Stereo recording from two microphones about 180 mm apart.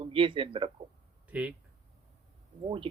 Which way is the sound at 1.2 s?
5° right (ahead or behind).